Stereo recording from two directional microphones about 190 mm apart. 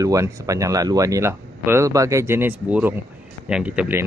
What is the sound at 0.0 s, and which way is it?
Speech, 15° right (ahead or behind).